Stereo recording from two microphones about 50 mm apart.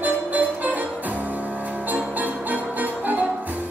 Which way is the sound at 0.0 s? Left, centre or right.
Right.